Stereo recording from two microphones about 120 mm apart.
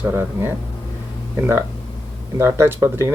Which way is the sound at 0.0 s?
20° right (ahead or behind).